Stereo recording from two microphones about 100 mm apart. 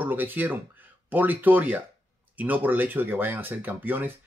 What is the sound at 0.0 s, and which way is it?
Speech, 20° right (ahead or behind).